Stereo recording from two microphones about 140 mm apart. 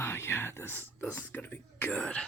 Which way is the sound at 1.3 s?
15° left (ahead or behind).